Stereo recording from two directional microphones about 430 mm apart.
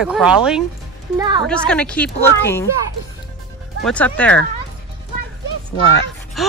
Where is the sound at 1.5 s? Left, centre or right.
Centre.